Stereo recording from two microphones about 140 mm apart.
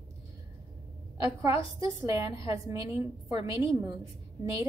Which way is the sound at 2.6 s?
25° right (ahead or behind).